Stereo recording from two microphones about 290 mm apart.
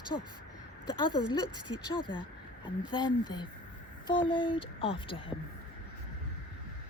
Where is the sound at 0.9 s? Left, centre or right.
Centre.